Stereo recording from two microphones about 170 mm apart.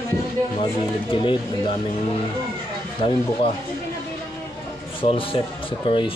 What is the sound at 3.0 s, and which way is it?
Speech, 35° left (ahead or behind).